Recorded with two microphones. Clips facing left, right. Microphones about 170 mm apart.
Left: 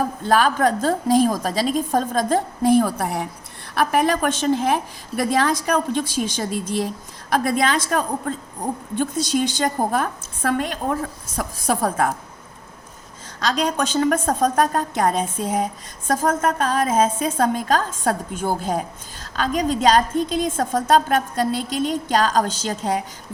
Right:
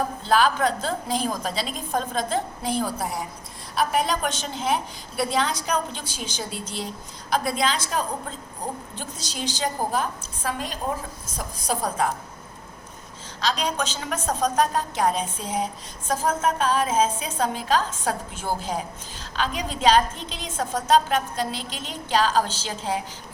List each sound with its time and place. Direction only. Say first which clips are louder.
0.2 s a woman's voice: left 3 dB; 50° left (ahead or behind)
13.4 s a woman's voice: left 4 dB; 50° left (ahead or behind)